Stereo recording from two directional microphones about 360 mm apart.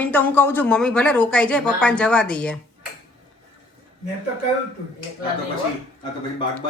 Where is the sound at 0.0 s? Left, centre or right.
Centre.